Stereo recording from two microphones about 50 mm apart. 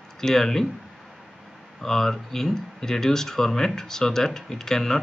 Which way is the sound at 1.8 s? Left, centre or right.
Centre.